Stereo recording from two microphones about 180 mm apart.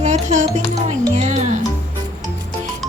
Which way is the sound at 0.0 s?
40° right (ahead or behind).